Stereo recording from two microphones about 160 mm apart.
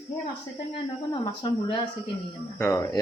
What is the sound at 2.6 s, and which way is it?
Speech, 15° left (ahead or behind).